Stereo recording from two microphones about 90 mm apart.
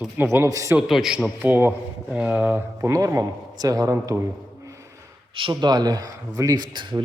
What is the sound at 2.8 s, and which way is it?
A man's voice, 35° right (ahead or behind).